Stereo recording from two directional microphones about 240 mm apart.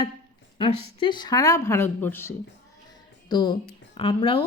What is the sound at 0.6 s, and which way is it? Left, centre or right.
Speech, left.